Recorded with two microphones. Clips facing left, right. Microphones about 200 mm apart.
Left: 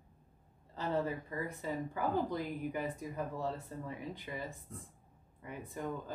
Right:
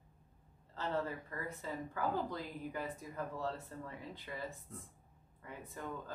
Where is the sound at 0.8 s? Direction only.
15° left (ahead or behind).